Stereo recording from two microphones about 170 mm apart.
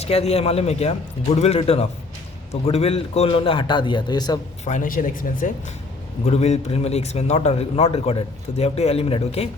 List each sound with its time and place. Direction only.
0.0 s a man's voice: 40° left (ahead or behind)
4.6 s speech: 50° left (ahead or behind)
6.2 s a man's voice: 40° left (ahead or behind)